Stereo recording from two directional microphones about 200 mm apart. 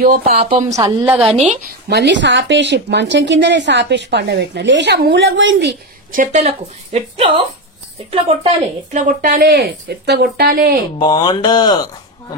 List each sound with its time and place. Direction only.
0.0 s a woman's voice: 45° right (ahead or behind)
0.7 s a woman's voice: 10° right (ahead or behind)
1.5 s speech: 50° right (ahead or behind)
6.3 s speech: 30° right (ahead or behind)
8.9 s speech: 40° right (ahead or behind)
11.0 s speech: 20° left (ahead or behind)